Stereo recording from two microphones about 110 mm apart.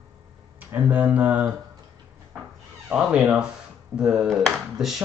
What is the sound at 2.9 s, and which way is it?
Speech, 10° right (ahead or behind).